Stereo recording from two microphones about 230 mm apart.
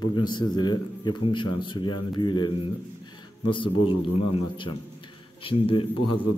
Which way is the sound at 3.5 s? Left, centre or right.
Left.